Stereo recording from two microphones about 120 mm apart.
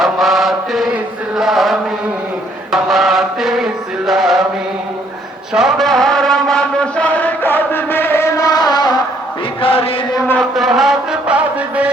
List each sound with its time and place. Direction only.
0.0 s chant: centre (ahead or behind)
2.7 s music: centre (ahead or behind)
5.5 s mantra: centre (ahead or behind); by 8.4 s 20° left (ahead or behind)
8.4 s a sound: 35° left (ahead or behind)
9.6 s chant: 50° left (ahead or behind)
10.5 s music: centre (ahead or behind)